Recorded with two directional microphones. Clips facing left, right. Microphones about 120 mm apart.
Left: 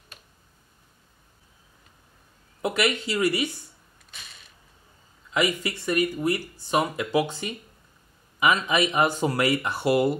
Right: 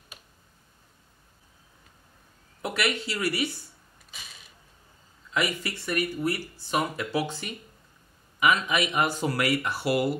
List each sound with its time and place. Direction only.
2.6 s speech: 20° left (ahead or behind)
4.1 s mechanisms: centre (ahead or behind)
5.3 s speech: 20° left (ahead or behind)
8.4 s speech: 25° left (ahead or behind)